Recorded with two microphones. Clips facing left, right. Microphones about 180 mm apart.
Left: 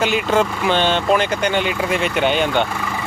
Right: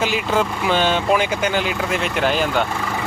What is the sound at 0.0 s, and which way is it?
Speech, centre (ahead or behind).